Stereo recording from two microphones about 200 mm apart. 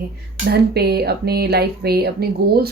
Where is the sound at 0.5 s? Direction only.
55° right (ahead or behind).